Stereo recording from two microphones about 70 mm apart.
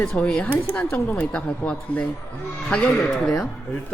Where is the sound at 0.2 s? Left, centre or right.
Centre.